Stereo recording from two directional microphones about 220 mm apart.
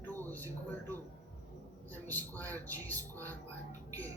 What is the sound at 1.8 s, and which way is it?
A man's voice, 10° left (ahead or behind).